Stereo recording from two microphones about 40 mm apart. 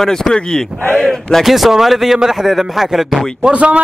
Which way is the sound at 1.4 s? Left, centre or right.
Centre.